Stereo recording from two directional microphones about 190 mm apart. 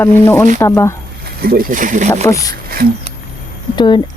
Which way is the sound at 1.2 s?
55° right (ahead or behind).